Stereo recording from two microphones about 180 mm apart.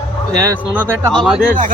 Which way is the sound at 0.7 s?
10° right (ahead or behind).